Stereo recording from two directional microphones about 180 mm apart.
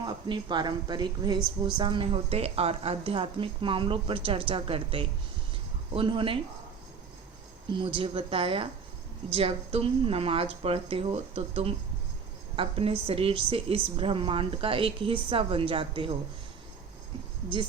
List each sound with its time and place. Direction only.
0.0 s speech: 25° right (ahead or behind)
7.7 s speech: 30° right (ahead or behind)